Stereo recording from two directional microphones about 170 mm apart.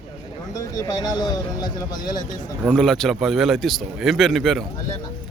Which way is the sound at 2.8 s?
5° left (ahead or behind).